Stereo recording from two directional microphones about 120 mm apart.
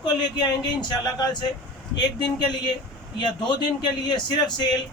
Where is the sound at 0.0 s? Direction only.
35° left (ahead or behind).